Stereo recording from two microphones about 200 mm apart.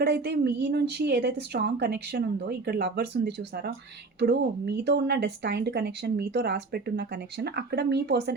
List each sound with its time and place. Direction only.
0.0 s speech: 55° right (ahead or behind)